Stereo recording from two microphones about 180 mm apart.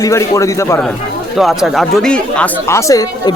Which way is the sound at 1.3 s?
Centre (ahead or behind).